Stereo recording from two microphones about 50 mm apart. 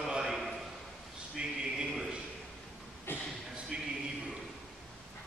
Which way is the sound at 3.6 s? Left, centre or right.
Centre.